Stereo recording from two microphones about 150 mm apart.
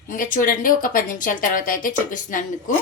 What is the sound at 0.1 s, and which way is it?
A woman's voice, 60° left (ahead or behind).